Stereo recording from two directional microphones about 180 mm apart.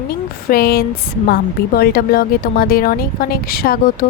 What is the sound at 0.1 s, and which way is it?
Speech, 55° left (ahead or behind).